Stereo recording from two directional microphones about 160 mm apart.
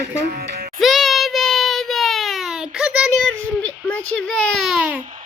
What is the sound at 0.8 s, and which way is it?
Child singing, centre (ahead or behind).